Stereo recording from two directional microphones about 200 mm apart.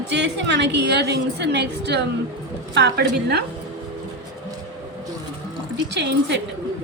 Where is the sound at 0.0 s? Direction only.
60° right (ahead or behind).